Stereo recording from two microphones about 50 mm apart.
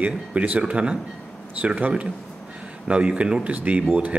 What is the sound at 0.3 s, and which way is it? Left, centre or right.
Speech, right.